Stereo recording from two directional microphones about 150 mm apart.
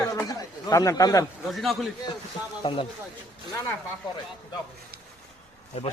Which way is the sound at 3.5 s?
20° left (ahead or behind).